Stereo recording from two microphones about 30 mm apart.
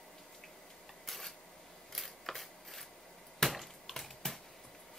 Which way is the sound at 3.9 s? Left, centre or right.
Centre.